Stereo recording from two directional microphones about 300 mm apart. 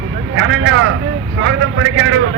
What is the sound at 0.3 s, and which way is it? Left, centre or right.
A man's voice, right.